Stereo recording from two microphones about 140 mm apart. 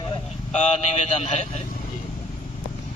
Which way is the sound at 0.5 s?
55° left (ahead or behind).